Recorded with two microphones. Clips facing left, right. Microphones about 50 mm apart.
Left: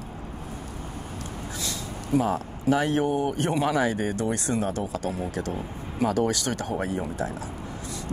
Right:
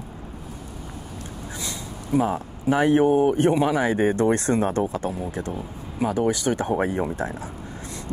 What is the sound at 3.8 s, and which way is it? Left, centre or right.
Speech, right.